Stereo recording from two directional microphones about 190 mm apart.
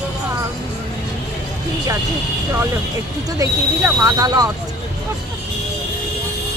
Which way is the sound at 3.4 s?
15° right (ahead or behind).